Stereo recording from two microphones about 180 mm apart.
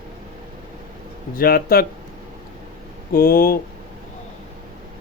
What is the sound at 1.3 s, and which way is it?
Speech, 55° left (ahead or behind).